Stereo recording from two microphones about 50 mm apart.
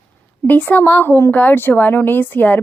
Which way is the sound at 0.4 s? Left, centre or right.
Left.